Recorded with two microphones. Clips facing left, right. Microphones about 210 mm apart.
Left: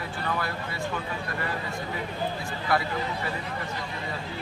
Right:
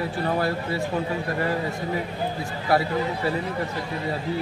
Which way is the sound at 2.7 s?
35° right (ahead or behind).